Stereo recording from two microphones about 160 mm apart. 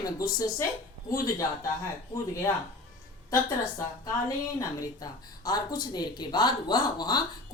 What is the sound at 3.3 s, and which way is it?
Speech, 20° left (ahead or behind).